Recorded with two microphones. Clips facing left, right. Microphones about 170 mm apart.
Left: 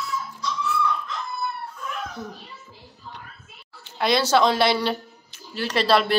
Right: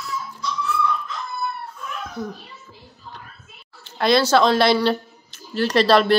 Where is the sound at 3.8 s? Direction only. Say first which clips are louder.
Right 4 dB; 15° left (ahead or behind).